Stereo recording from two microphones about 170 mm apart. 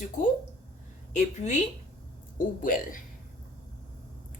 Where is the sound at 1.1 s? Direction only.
45° left (ahead or behind).